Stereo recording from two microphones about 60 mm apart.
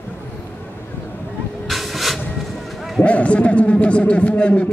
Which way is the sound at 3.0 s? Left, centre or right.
Left.